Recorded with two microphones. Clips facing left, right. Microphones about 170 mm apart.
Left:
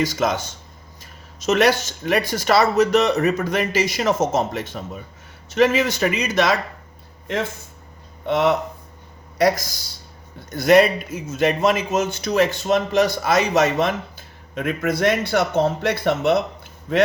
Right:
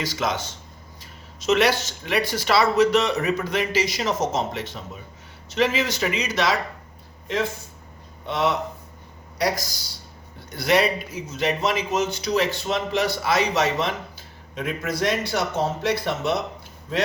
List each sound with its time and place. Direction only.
0.0 s a man's voice: 50° left (ahead or behind)
1.4 s a man's voice: 45° left (ahead or behind)
8.3 s a man's voice: 55° left (ahead or behind)
10.5 s a man's voice: 50° left (ahead or behind)